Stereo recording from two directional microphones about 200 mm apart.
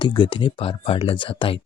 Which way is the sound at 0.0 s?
25° left (ahead or behind).